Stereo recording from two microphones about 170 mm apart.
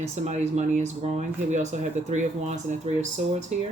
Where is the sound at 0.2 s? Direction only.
40° right (ahead or behind).